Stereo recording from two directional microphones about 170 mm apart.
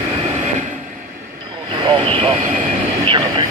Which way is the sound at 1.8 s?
30° right (ahead or behind).